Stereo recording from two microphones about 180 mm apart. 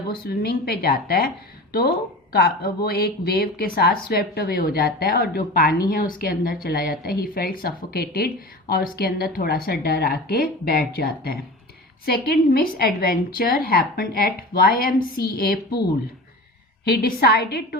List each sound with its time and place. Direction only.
0.2 s speech: 55° left (ahead or behind)
17.0 s speech: 60° left (ahead or behind)